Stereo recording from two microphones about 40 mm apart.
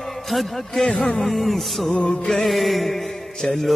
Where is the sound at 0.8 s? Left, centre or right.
Centre.